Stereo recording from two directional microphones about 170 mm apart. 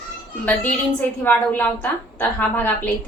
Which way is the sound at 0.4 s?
10° left (ahead or behind).